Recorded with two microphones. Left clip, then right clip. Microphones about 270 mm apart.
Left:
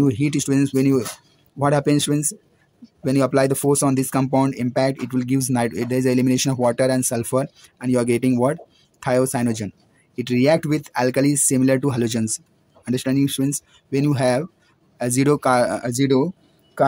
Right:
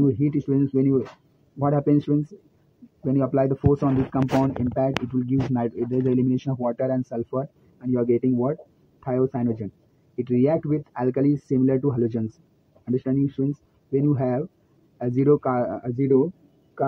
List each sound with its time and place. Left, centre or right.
0.0 s speech: left